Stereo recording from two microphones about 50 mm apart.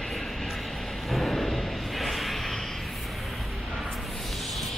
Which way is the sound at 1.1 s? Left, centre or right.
Centre.